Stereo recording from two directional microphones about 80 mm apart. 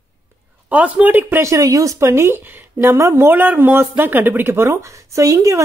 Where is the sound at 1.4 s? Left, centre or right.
Right.